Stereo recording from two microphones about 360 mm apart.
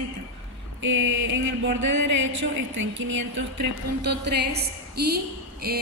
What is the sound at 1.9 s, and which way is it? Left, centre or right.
Speech, right.